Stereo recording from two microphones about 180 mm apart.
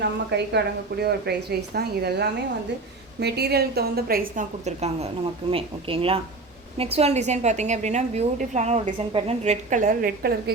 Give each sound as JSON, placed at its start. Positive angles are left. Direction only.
{"t": 0.0, "sound": "a woman's voice", "side_deg": -70}